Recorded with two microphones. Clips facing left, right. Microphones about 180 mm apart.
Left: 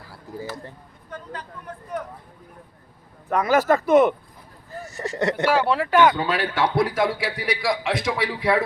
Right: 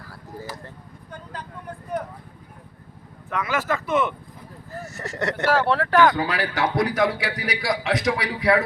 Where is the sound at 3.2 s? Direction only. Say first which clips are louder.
Left 7 dB; 40° left (ahead or behind).